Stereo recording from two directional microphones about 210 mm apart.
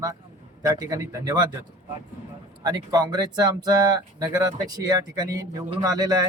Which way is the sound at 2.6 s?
20° right (ahead or behind).